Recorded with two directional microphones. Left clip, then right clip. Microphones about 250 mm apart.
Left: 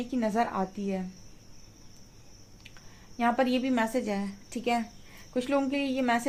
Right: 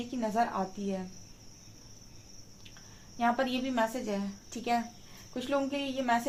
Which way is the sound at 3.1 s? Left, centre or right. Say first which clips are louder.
Left 3 dB; left.